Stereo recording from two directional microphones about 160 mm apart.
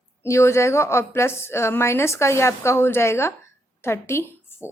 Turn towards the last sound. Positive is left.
turn(degrees=15)  # may be behind; listen again after turning